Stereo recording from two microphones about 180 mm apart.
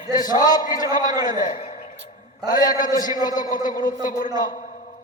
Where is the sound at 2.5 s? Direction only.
20° left (ahead or behind).